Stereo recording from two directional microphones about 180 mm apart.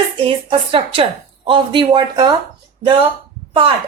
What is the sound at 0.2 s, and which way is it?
Speech, 30° right (ahead or behind).